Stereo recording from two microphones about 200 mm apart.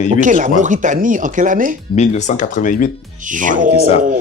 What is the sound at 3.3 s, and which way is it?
Speech, 40° right (ahead or behind).